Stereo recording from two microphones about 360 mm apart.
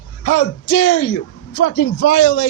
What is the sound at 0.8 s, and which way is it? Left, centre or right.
Speech, left.